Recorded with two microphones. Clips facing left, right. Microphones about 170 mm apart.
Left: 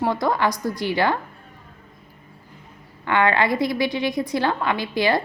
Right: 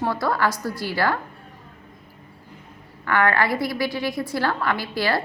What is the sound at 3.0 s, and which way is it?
A woman's voice, 20° left (ahead or behind).